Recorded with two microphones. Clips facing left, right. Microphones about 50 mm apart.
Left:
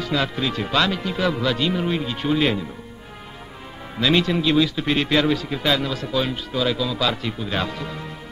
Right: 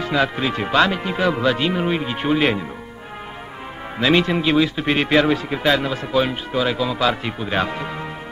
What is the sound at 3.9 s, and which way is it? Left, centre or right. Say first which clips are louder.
A man's voice: right 2 dB; right.